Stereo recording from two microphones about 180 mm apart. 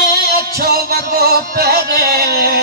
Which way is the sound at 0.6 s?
55° right (ahead or behind).